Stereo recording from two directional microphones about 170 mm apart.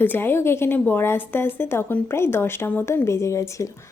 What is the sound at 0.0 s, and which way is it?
A woman's voice, 10° left (ahead or behind).